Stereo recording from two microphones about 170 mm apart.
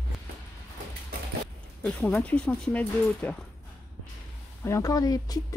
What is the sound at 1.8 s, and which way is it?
Speech, 5° left (ahead or behind).